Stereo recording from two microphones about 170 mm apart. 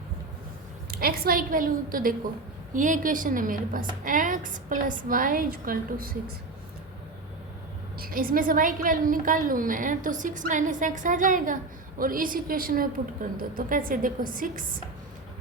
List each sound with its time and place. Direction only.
0.9 s a woman's voice: 60° right (ahead or behind)
7.9 s a woman's voice: 60° right (ahead or behind)